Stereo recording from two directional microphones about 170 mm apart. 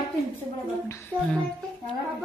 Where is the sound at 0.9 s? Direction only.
15° left (ahead or behind).